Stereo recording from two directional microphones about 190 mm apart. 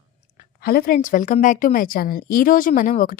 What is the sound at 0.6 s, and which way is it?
A woman's voice, 55° left (ahead or behind).